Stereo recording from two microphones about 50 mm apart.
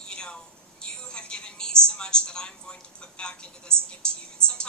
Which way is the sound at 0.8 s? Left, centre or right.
Centre.